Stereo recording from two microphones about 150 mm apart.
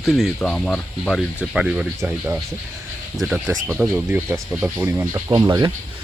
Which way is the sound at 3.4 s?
15° right (ahead or behind).